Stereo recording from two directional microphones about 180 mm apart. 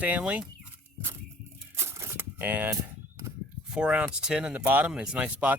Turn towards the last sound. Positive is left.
turn(degrees=-10)  # may be behind; listen again after turning